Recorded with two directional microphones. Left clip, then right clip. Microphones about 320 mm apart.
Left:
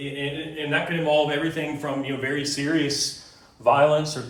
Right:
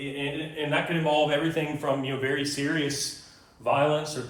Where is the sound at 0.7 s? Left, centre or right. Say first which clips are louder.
Left 3 dB; centre.